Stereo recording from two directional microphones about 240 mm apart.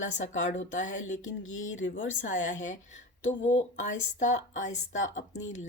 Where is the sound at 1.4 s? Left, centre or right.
Left.